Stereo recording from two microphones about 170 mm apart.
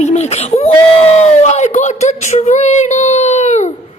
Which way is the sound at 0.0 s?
40° left (ahead or behind).